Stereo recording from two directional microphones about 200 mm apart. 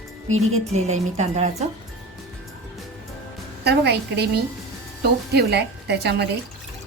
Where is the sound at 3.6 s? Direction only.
55° right (ahead or behind).